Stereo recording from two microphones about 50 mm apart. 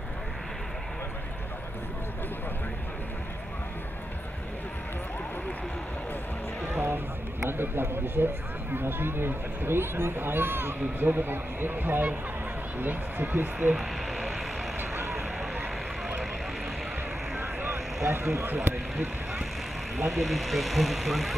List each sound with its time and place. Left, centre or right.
6.7 s music: right
7.4 s speech: right
13.7 s speech: centre
17.4 s vehicle: right
18.0 s speech: right
20.1 s speech: centre